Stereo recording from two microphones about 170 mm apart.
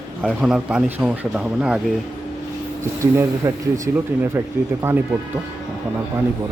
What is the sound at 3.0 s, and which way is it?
Speech, 15° right (ahead or behind).